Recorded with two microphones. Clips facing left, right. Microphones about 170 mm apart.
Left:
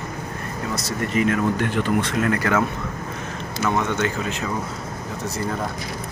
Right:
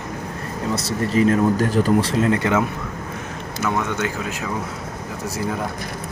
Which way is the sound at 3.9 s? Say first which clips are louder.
Left 1 dB; 10° right (ahead or behind).